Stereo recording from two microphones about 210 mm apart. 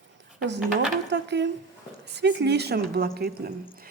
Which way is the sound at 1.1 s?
55° right (ahead or behind).